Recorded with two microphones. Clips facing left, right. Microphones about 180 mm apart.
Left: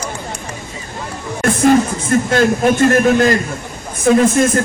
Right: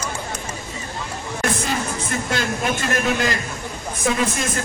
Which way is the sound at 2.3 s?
50° left (ahead or behind).